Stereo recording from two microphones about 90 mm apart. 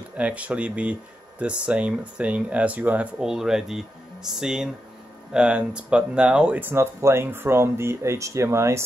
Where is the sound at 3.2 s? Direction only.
5° right (ahead or behind).